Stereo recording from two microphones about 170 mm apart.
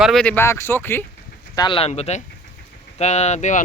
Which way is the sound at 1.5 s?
25° left (ahead or behind).